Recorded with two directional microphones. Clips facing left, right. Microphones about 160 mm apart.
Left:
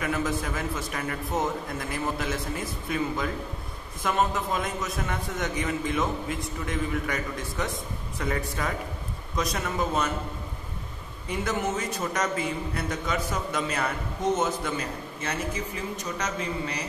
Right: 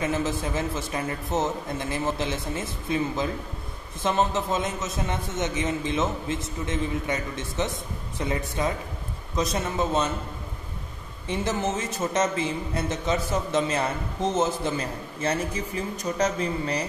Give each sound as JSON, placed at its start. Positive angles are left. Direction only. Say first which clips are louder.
{"t": 0.0, "sound": "a man's voice", "louder": "right 2 dB", "side_deg": -25}
{"t": 11.2, "sound": "a man's voice", "louder": "right 2 dB", "side_deg": -25}